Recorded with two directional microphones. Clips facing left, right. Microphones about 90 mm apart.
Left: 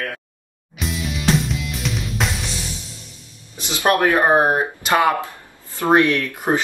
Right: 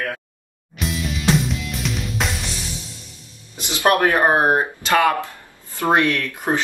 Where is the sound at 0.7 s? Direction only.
Centre (ahead or behind).